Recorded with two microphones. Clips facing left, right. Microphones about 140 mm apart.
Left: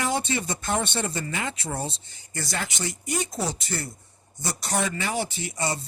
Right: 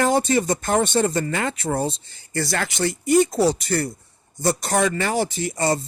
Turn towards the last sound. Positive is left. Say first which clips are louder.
# right 7 dB
turn(degrees=-50)  # may be behind; listen again after turning